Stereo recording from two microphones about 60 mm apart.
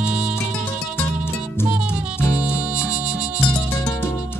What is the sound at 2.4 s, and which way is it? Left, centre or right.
Music, centre.